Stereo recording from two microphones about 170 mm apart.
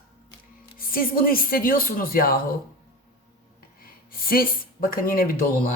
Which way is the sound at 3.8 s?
60° left (ahead or behind).